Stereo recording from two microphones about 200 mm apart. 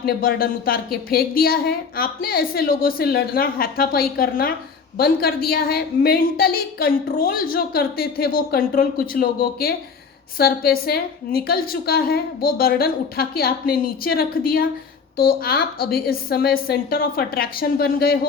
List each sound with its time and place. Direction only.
0.0 s a woman's voice: 45° left (ahead or behind)